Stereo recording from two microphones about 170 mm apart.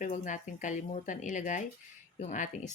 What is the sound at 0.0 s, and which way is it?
Speech, 50° left (ahead or behind).